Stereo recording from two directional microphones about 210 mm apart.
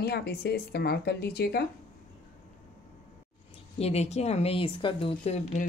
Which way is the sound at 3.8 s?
30° left (ahead or behind).